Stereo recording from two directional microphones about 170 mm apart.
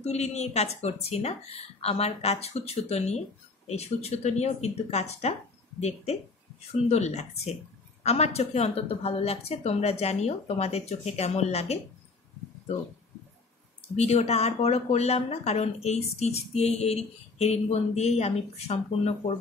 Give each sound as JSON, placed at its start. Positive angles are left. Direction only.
{"t": 0.0, "sound": "speech", "side_deg": 40}
{"t": 13.9, "sound": "speech", "side_deg": 40}